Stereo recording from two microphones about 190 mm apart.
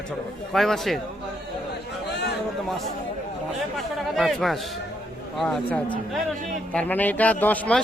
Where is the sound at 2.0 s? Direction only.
60° left (ahead or behind).